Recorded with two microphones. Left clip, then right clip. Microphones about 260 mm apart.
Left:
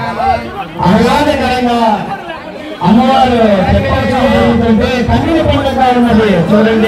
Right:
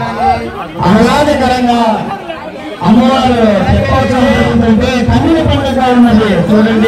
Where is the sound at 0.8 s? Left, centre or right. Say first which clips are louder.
Right 1 dB; left.